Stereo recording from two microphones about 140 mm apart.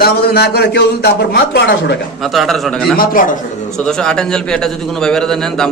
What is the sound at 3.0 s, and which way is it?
Speech, 85° left.